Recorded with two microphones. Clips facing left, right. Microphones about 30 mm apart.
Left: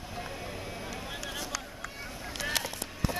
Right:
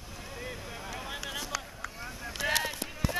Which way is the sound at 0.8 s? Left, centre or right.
Centre.